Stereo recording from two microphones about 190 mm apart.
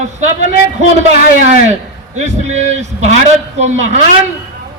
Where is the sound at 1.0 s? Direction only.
35° right (ahead or behind).